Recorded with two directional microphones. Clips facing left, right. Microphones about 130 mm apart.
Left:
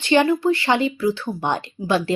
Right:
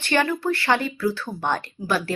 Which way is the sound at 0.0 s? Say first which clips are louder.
Left 6 dB; 15° left (ahead or behind).